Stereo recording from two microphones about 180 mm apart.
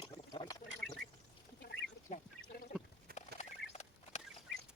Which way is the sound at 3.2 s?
35° left (ahead or behind).